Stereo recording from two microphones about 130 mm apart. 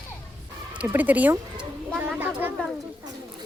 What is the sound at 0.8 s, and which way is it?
Speech, 15° right (ahead or behind).